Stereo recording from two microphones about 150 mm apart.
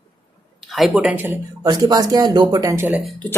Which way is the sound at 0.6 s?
Centre (ahead or behind).